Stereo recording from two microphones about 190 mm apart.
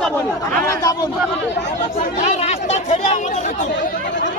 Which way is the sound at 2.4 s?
35° left (ahead or behind).